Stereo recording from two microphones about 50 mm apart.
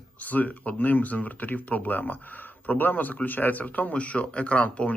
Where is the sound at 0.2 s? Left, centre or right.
Left.